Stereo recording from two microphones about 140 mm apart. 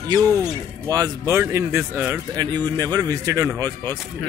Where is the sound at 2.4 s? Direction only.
25° right (ahead or behind).